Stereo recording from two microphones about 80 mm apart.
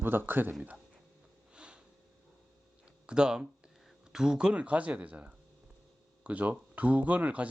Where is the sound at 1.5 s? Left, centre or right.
Centre.